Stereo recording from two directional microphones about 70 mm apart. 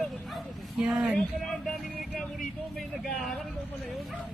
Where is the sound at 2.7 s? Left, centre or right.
Centre.